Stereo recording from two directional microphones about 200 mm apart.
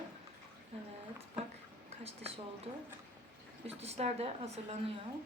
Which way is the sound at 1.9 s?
30° right (ahead or behind).